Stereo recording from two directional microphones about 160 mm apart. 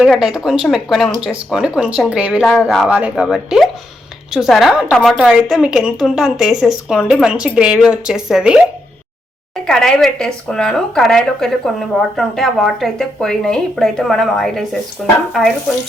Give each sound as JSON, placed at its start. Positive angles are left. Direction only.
{"t": 0.0, "sound": "speech", "side_deg": -5}
{"t": 9.6, "sound": "speech", "side_deg": 5}